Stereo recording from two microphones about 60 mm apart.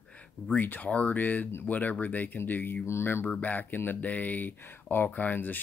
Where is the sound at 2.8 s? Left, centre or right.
Left.